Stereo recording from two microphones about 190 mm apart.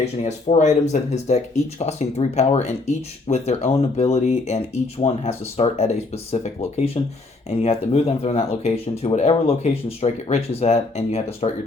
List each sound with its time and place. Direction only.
0.0 s speech: 35° left (ahead or behind)